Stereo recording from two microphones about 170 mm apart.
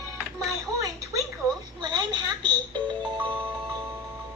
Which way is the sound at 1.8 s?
25° right (ahead or behind).